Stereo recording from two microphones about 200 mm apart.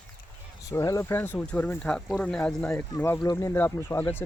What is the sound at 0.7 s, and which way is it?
Speech, 15° left (ahead or behind).